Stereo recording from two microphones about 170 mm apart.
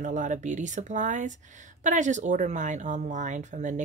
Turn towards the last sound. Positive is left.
turn(degrees=-45)  # may be behind; listen again after turning